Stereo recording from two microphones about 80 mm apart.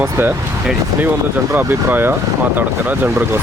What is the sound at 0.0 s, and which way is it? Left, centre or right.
Speech, right.